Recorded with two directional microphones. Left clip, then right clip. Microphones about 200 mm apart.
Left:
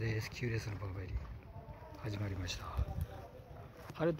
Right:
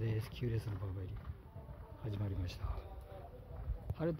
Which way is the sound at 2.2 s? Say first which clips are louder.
Left 5 dB; 10° right (ahead or behind).